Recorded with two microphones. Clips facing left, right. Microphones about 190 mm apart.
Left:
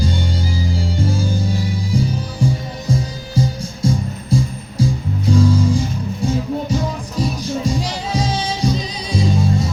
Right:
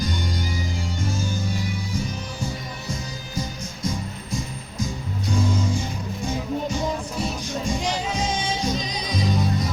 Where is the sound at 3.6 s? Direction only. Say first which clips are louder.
Left 8 dB; 30° left (ahead or behind).